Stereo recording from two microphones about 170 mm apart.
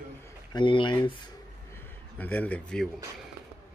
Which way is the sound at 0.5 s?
30° left (ahead or behind).